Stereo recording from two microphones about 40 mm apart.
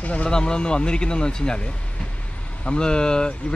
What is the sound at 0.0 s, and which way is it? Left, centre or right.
Speech, left.